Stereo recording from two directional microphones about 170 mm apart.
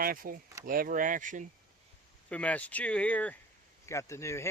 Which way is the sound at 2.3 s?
10° left (ahead or behind).